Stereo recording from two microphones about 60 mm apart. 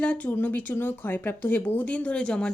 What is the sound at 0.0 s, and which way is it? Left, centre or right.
Speech, left.